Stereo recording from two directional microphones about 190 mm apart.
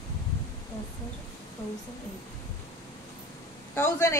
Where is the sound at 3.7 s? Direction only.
15° left (ahead or behind).